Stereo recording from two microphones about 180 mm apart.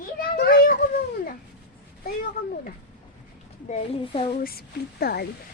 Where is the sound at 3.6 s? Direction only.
40° left (ahead or behind).